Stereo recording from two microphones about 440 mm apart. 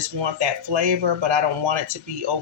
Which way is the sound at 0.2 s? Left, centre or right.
Right.